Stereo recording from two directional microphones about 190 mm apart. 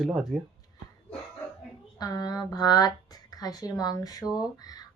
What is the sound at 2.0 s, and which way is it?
A woman's voice, 20° left (ahead or behind).